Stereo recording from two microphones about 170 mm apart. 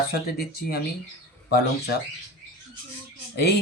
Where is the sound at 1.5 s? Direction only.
65° left (ahead or behind).